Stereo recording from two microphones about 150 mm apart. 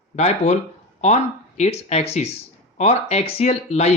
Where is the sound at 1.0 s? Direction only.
50° left (ahead or behind).